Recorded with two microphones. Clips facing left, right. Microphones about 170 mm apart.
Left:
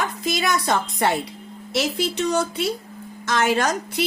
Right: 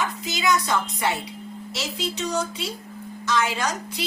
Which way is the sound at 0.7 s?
60° left (ahead or behind).